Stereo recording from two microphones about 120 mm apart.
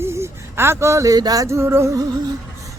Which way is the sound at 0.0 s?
20° right (ahead or behind).